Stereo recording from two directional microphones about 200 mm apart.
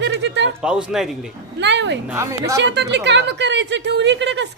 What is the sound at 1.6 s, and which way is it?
Speech, 60° right (ahead or behind).